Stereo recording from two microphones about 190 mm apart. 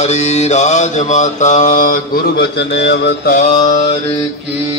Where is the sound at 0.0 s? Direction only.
35° left (ahead or behind); by 3.4 s 55° left (ahead or behind).